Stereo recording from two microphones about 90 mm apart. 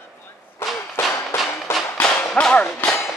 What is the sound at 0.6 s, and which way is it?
Thump, 25° left (ahead or behind).